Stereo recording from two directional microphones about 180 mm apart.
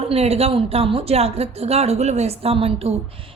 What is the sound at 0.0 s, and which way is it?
A woman's voice, 35° right (ahead or behind).